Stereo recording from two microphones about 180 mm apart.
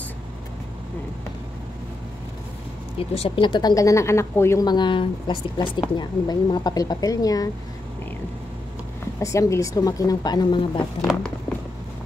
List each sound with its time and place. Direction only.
3.0 s speech: 30° left (ahead or behind)
9.2 s speech: 15° left (ahead or behind)